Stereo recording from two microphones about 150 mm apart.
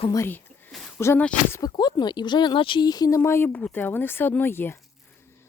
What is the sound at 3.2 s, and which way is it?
Speech, 15° left (ahead or behind).